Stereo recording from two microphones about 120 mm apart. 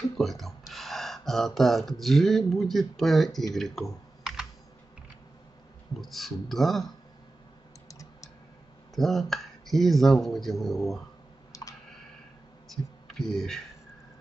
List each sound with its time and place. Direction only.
0.2 s speech: centre (ahead or behind)
5.9 s speech: centre (ahead or behind)
7.9 s typing: 30° left (ahead or behind)
8.9 s speech: centre (ahead or behind)
12.6 s a sound: 5° left (ahead or behind)